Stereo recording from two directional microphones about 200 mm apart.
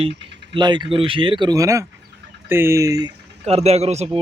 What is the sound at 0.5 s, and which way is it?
Speech, 20° right (ahead or behind).